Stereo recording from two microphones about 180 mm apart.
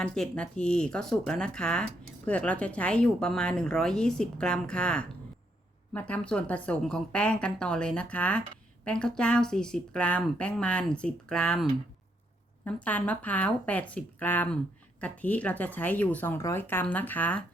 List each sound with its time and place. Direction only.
0.0 s a woman's voice: 5° left (ahead or behind)
12.6 s speech: 10° left (ahead or behind)